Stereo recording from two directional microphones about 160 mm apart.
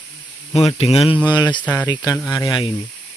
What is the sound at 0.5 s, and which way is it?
Speech, 40° left (ahead or behind).